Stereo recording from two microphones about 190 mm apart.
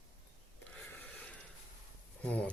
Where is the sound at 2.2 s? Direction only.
5° left (ahead or behind).